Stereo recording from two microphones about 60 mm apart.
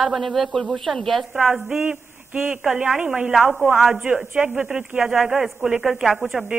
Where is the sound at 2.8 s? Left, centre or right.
Centre.